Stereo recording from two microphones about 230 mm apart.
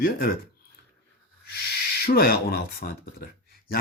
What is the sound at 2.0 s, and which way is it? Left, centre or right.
A man's voice, left.